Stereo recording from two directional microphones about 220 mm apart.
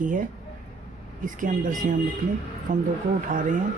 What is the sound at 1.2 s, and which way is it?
Speech, 35° right (ahead or behind).